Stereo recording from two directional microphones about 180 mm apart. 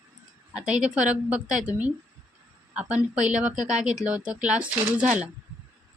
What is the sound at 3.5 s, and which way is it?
Speech, 40° right (ahead or behind).